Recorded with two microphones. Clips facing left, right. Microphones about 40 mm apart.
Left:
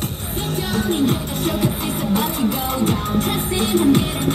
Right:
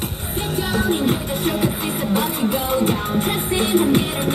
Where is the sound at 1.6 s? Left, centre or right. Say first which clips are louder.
Even; centre.